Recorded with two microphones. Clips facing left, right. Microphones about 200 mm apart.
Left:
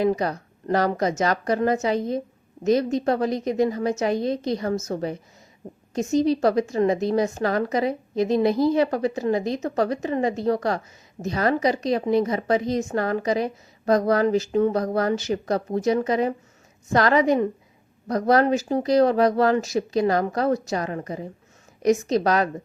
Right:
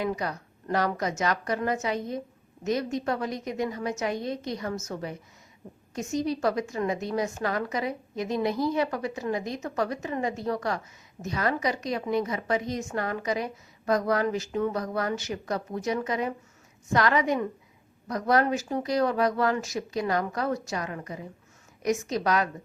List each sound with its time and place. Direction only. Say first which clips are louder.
0.0 s a woman's voice: left 8 dB; 35° left (ahead or behind)